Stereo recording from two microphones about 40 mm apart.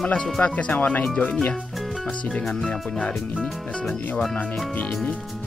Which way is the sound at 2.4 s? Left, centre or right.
Left.